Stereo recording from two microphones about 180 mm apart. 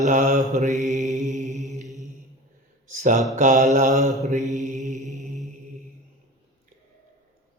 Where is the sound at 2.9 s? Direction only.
45° right (ahead or behind).